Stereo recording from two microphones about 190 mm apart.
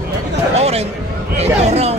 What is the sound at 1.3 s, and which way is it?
Speech, 35° right (ahead or behind).